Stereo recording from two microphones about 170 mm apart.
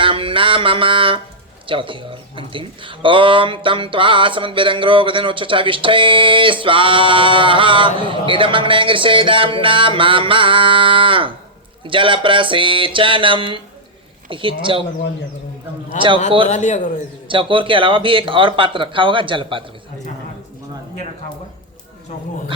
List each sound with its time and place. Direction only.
0.0 s music: 30° right (ahead or behind)
1.6 s speech: 30° right (ahead or behind)
11.9 s a sound: 30° right (ahead or behind)
16.0 s speech: 30° right (ahead or behind)
16.5 s speech: 45° left (ahead or behind)
17.2 s speech: 30° right (ahead or behind)